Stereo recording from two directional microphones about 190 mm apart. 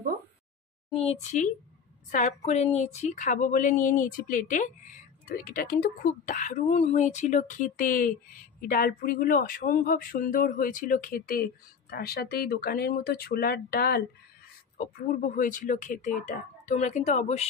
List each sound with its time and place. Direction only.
0.9 s speech: 35° left (ahead or behind)